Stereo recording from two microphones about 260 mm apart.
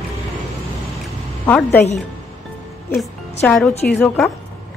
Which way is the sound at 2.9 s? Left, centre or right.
Centre.